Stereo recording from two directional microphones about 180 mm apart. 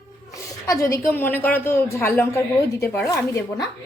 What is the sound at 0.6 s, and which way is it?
A woman's voice, 15° left (ahead or behind).